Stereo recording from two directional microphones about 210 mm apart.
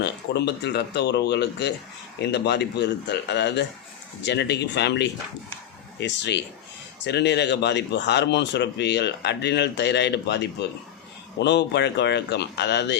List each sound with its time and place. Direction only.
0.0 s speech: 55° left (ahead or behind)